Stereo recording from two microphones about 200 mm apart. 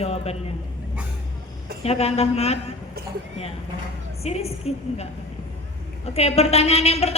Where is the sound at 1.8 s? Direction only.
30° left (ahead or behind).